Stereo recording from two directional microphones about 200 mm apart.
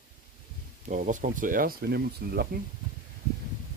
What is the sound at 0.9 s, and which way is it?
Speech, 40° right (ahead or behind).